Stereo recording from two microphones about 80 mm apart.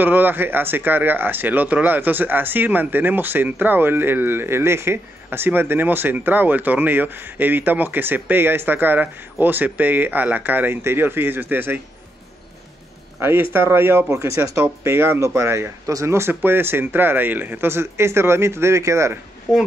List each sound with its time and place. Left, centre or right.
0.0 s speech: right
13.2 s speech: right